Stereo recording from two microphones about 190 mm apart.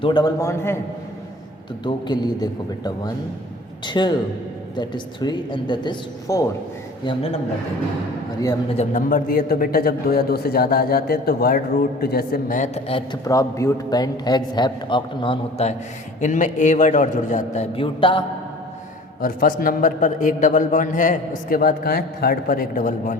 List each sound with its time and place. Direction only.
0.0 s a man's voice: 25° left (ahead or behind)
1.8 s a man's voice: 25° left (ahead or behind)
8.7 s a man's voice: 40° left (ahead or behind)
13.2 s a man's voice: 15° left (ahead or behind)
16.2 s a man's voice: 40° left (ahead or behind)
19.2 s a man's voice: 50° left (ahead or behind)